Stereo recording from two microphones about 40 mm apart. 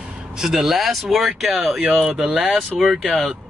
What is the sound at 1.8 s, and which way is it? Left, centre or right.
Speech, centre.